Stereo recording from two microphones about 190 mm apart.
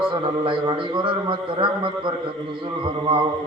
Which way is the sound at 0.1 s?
25° right (ahead or behind).